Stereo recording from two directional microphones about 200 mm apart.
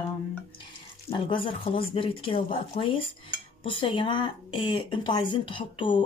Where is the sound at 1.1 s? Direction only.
25° left (ahead or behind).